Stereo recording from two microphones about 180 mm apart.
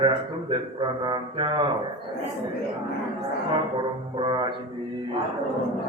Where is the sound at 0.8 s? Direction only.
25° right (ahead or behind).